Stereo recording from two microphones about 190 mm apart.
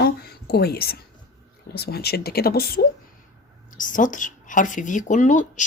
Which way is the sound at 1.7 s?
55° left (ahead or behind).